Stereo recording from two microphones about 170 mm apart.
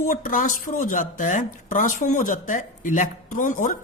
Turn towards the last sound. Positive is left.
turn(degrees=50)  # may be behind; listen again after turning